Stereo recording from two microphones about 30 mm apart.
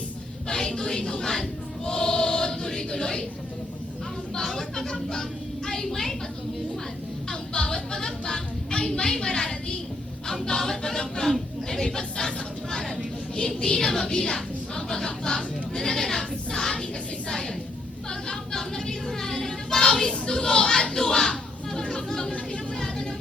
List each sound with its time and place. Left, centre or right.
0.4 s music: centre
1.2 s choir: left
4.4 s choir: centre
5.6 s a woman's voice: centre
7.5 s music: left
7.9 s speech: left
9.2 s choir: left
11.7 s a woman's voice: centre
13.6 s choir: left
14.2 s speech: centre
17.2 s choir: left
18.1 s a sound: left
19.9 s a sound: left